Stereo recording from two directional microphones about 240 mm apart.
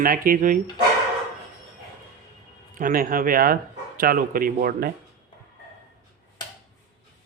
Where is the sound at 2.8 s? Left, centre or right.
Right.